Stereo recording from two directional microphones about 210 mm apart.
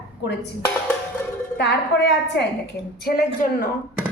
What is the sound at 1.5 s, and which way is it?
A woman's voice, 50° left (ahead or behind).